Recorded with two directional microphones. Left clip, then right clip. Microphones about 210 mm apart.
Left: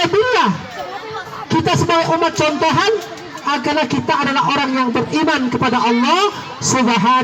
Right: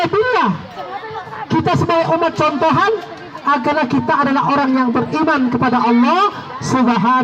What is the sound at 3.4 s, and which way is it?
A man's voice, 50° right (ahead or behind).